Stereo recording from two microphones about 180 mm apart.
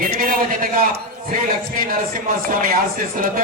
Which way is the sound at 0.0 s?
50° right (ahead or behind).